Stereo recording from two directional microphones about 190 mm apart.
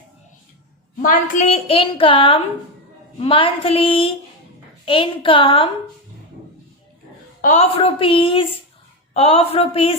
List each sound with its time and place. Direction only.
1.0 s a woman's voice: 40° left (ahead or behind)
7.4 s a woman's voice: 35° left (ahead or behind)